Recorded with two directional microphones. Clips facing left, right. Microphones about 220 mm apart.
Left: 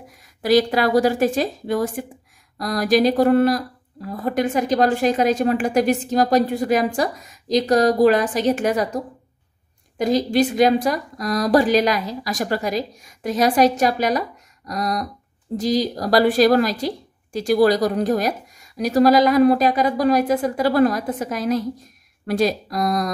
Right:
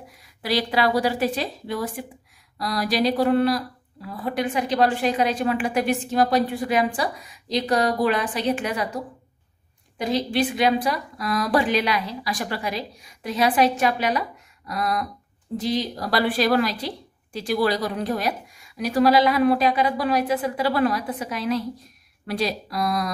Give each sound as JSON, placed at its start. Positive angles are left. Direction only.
{"t": 0.4, "sound": "a woman's voice", "side_deg": 45}
{"t": 14.7, "sound": "a sound", "side_deg": 40}
{"t": 15.5, "sound": "a woman's voice", "side_deg": 40}